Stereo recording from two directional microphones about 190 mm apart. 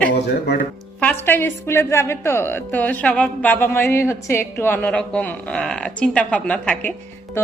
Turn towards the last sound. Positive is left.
turn(degrees=10)  # may be behind; listen again after turning